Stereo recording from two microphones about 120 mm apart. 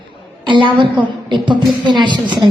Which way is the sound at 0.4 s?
40° right (ahead or behind).